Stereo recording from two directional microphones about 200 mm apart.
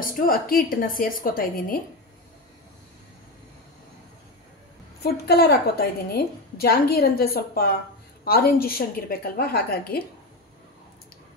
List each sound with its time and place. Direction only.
0.0 s a woman's voice: 45° left (ahead or behind)
5.0 s a woman's voice: 50° left (ahead or behind)